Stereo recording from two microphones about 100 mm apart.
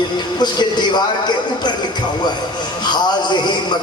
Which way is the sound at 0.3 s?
45° left (ahead or behind).